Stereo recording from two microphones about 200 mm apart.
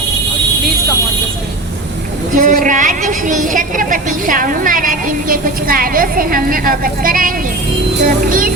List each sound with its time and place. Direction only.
2.3 s a woman's voice: 40° right (ahead or behind)